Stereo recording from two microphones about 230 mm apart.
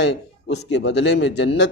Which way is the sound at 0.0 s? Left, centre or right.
Left.